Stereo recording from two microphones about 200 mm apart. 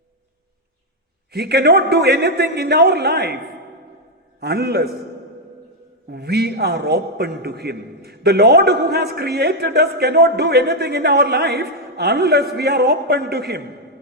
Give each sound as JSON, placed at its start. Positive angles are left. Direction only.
{"t": 1.3, "sound": "a man's voice", "side_deg": -55}
{"t": 4.4, "sound": "a man's voice", "side_deg": -55}
{"t": 6.1, "sound": "a man's voice", "side_deg": -55}